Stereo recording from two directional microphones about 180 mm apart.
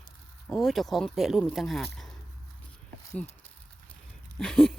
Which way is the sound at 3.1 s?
10° left (ahead or behind).